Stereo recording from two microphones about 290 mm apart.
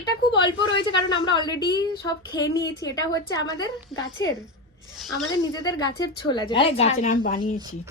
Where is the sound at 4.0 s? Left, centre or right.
Left.